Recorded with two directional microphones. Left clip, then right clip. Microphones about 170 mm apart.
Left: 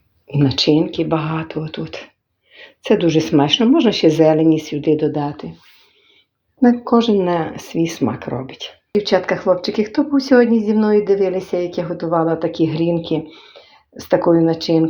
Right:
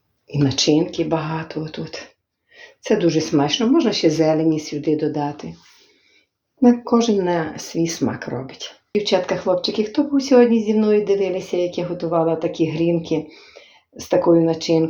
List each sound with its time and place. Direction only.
0.3 s speech: 45° left (ahead or behind)
6.6 s speech: 30° left (ahead or behind)